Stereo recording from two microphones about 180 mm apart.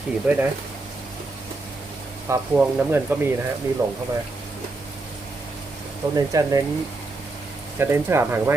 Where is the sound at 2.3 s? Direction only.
10° right (ahead or behind).